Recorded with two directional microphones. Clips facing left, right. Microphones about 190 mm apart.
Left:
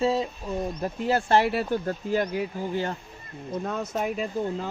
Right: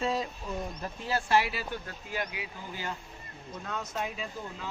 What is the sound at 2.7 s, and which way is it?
Speech, 55° left (ahead or behind).